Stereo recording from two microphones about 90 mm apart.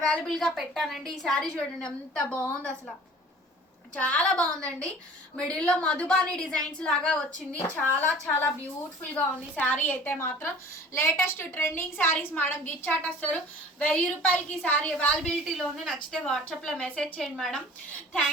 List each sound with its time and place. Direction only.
0.1 s a woman's voice: 5° left (ahead or behind)
3.9 s a woman's voice: 15° left (ahead or behind)
7.7 s a woman's voice: 20° left (ahead or behind)
9.1 s a woman's voice: 15° left (ahead or behind)
15.4 s a woman's voice: centre (ahead or behind)